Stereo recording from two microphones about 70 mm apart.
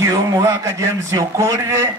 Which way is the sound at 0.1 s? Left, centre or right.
Right.